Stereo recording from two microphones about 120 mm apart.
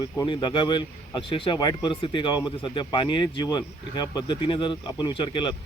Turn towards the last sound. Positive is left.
turn(degrees=40)  # may be behind; listen again after turning